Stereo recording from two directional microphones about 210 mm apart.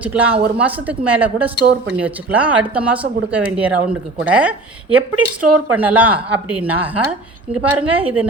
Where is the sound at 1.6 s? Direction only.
50° right (ahead or behind).